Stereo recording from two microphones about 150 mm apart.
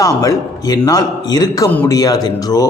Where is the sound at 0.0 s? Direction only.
20° left (ahead or behind).